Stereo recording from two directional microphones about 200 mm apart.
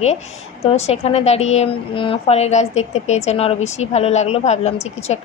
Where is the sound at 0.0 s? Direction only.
35° left (ahead or behind).